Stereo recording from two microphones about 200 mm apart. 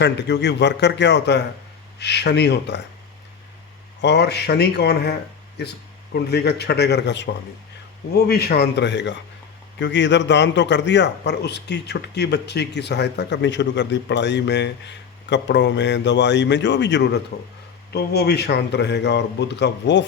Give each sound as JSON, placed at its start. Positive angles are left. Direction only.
{"t": 0.0, "sound": "a man's voice", "side_deg": 60}
{"t": 4.0, "sound": "a man's voice", "side_deg": 55}